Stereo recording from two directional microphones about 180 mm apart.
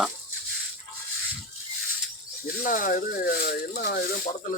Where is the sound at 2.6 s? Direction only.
50° left (ahead or behind).